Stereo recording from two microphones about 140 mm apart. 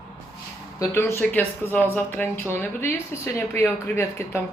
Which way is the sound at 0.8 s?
20° left (ahead or behind).